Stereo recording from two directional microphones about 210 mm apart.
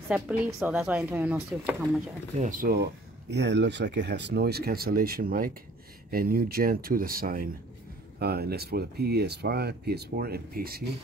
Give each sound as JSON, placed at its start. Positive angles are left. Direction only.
{"t": 0.1, "sound": "speech", "side_deg": -5}
{"t": 2.3, "sound": "speech", "side_deg": -35}